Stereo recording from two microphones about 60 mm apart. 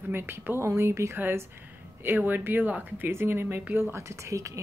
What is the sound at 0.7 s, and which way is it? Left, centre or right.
Speech, right.